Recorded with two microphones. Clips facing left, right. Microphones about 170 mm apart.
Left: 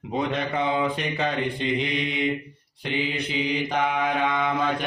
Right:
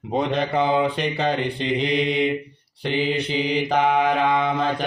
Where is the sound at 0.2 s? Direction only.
35° right (ahead or behind).